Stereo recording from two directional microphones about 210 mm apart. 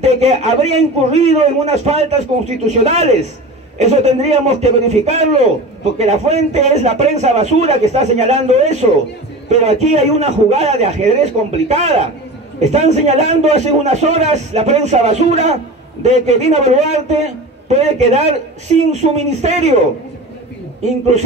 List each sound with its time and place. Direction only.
0.0 s a man's voice: 30° right (ahead or behind)